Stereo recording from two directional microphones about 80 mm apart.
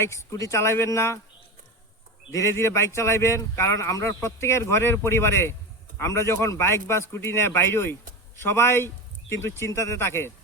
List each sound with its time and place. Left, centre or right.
0.0 s speech: left
2.3 s speech: left